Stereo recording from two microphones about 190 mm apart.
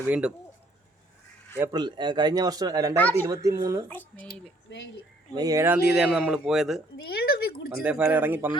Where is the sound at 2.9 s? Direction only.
10° left (ahead or behind).